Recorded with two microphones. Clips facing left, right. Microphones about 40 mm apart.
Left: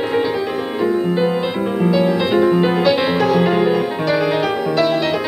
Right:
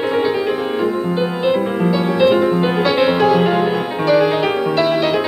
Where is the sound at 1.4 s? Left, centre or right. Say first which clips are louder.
Right 2 dB; centre.